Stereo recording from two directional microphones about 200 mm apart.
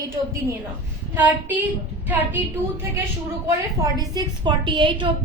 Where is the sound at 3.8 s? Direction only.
20° right (ahead or behind).